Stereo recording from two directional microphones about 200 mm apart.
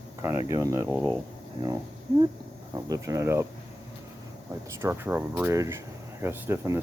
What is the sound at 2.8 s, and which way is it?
Speech, 15° right (ahead or behind).